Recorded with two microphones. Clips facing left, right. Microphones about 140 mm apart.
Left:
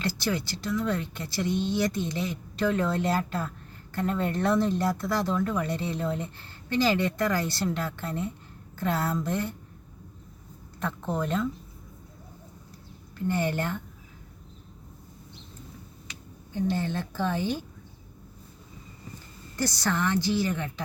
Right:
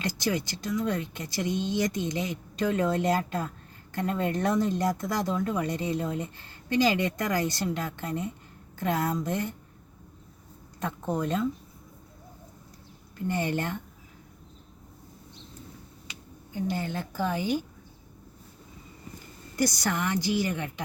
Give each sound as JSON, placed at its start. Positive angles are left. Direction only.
{"t": 0.0, "sound": "speech", "side_deg": -20}
{"t": 10.8, "sound": "speech", "side_deg": -20}
{"t": 13.2, "sound": "speech", "side_deg": -20}
{"t": 16.6, "sound": "speech", "side_deg": -10}
{"t": 19.5, "sound": "speech", "side_deg": -15}